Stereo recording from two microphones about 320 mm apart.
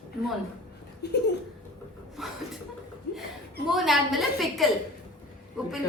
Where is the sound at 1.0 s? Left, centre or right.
Left.